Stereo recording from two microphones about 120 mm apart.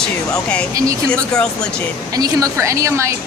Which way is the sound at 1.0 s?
10° left (ahead or behind).